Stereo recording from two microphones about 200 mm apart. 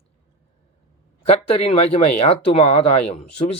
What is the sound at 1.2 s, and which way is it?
Speech, 30° left (ahead or behind).